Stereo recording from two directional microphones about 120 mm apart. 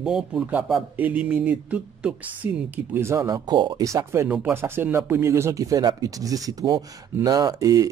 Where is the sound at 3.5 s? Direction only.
40° right (ahead or behind).